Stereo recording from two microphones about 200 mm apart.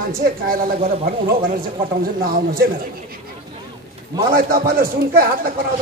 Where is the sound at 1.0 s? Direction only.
45° right (ahead or behind).